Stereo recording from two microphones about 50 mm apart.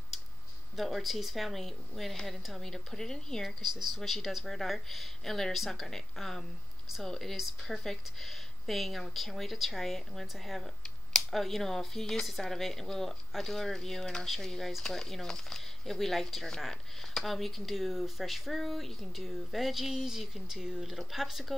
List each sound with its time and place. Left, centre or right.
0.7 s speech: centre
3.4 s speech: centre